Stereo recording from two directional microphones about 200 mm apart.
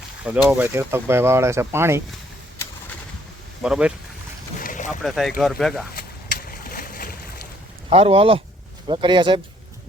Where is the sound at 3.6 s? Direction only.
5° right (ahead or behind).